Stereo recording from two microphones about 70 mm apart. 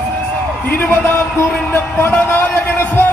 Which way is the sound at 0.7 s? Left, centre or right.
Left.